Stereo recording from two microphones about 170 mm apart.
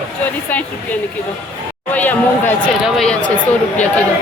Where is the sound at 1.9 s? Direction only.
10° left (ahead or behind).